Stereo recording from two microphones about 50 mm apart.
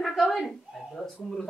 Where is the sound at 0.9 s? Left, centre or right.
Centre.